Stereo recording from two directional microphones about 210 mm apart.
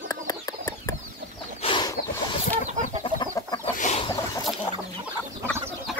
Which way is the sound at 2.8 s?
20° left (ahead or behind).